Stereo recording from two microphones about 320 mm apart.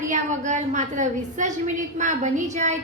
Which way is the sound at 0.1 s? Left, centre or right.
Right.